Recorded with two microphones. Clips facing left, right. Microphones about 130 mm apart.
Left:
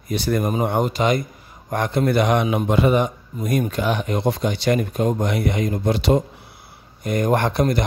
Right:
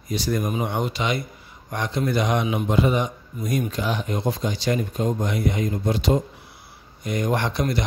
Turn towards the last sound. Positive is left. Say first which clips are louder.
# left 5 dB
turn(degrees=50)  # may be behind; listen again after turning